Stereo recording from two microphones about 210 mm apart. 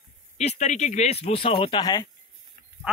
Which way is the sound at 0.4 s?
35° left (ahead or behind).